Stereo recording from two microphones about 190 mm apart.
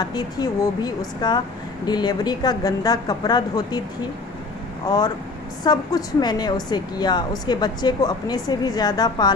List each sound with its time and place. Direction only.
0.0 s a woman's voice: 20° left (ahead or behind)
4.8 s a woman's voice: 20° left (ahead or behind)